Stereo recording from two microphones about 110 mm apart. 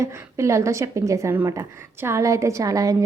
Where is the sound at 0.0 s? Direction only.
25° right (ahead or behind).